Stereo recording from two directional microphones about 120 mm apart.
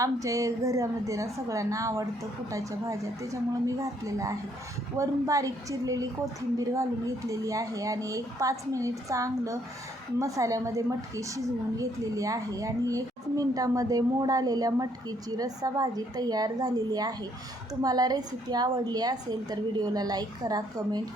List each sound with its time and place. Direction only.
0.0 s a woman's voice: 25° right (ahead or behind)
7.3 s a woman's voice: 30° right (ahead or behind)